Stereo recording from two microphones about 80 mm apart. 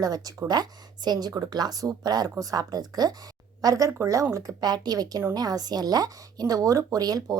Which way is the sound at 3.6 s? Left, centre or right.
Right.